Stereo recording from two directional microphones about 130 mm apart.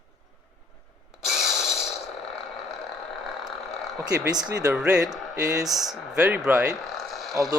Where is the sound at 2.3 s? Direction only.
50° left (ahead or behind).